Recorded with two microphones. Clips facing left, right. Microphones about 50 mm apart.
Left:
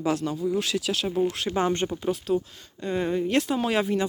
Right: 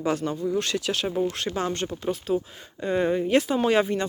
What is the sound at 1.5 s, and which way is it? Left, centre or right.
Speech, left.